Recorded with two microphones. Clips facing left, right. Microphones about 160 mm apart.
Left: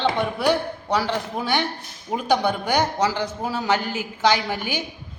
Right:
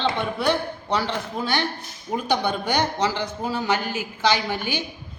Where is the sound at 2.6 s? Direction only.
10° left (ahead or behind).